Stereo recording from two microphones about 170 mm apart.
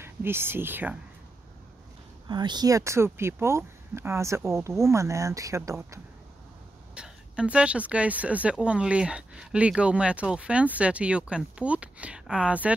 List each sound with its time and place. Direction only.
0.0 s speech: 15° right (ahead or behind)
2.2 s speech: 25° right (ahead or behind)
7.0 s speech: 5° right (ahead or behind)